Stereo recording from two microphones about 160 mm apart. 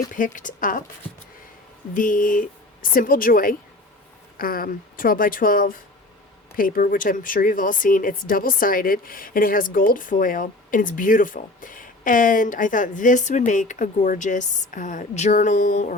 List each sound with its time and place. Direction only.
0.1 s speech: 55° left (ahead or behind)
1.9 s speech: 55° left (ahead or behind)